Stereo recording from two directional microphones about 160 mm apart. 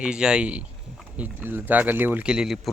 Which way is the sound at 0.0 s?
5° right (ahead or behind).